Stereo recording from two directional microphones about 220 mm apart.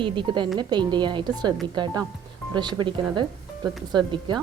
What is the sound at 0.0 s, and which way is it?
Speech, 20° right (ahead or behind).